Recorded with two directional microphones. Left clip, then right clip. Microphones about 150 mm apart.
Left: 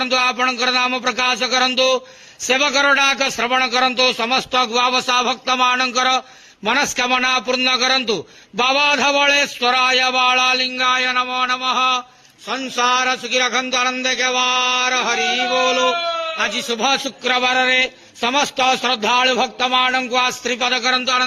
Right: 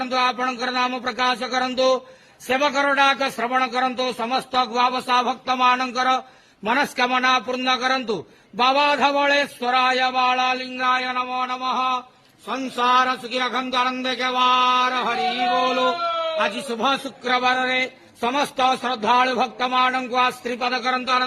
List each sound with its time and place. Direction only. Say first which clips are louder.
0.0 s a man's voice: left 4 dB; 10° left (ahead or behind)